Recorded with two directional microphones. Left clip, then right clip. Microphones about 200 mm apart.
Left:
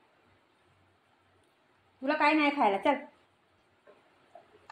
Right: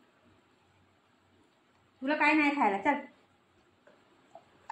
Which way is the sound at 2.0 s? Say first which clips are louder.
Left 1 dB; 15° left (ahead or behind).